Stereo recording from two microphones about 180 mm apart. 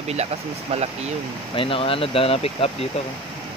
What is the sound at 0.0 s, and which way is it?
Speech, 35° right (ahead or behind).